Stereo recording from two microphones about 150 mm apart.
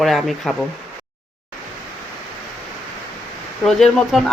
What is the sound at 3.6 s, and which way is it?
Speech, centre (ahead or behind).